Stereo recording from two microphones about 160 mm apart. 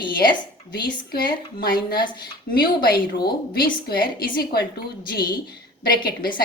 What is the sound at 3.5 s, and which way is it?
A woman's voice, 65° left (ahead or behind).